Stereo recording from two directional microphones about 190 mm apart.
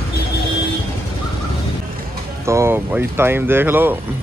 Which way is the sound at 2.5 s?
15° right (ahead or behind).